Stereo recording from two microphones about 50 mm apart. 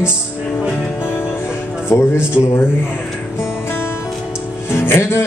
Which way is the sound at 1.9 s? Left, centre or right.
Left.